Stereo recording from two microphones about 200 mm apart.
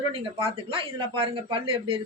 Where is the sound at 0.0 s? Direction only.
25° right (ahead or behind).